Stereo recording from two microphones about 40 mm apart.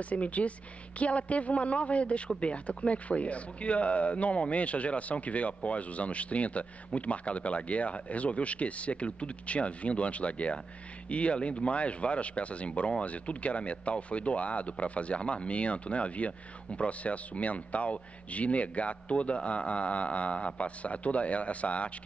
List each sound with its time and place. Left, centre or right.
0.0 s a man's voice: left